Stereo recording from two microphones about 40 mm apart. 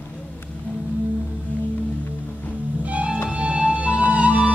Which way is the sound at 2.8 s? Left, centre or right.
Right.